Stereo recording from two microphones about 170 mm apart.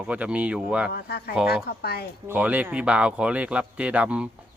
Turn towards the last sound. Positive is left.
turn(degrees=-5)  # may be behind; listen again after turning